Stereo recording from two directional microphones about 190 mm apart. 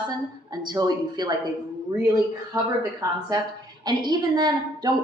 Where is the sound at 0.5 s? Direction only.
20° right (ahead or behind).